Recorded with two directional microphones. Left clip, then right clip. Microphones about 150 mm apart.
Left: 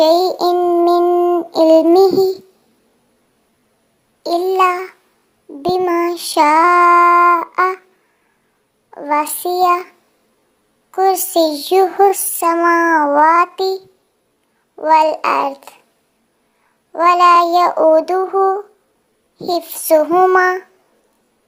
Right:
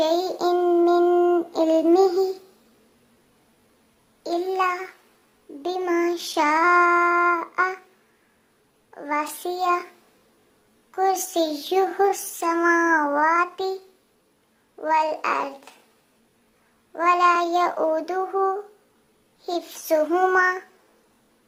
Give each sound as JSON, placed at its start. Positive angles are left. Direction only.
{"t": 0.0, "sound": "child singing", "side_deg": 30}
{"t": 4.2, "sound": "a sound", "side_deg": 30}
{"t": 5.6, "sound": "child singing", "side_deg": 30}
{"t": 8.9, "sound": "child singing", "side_deg": 30}
{"t": 10.9, "sound": "child singing", "side_deg": 30}
{"t": 16.9, "sound": "child singing", "side_deg": 30}